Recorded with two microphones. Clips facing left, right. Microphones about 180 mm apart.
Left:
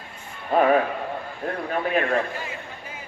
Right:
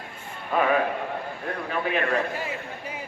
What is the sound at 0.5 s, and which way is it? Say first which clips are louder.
Music: left 4 dB; 40° left (ahead or behind).